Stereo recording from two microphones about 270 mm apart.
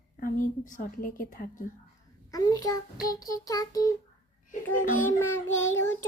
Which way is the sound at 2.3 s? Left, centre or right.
Centre.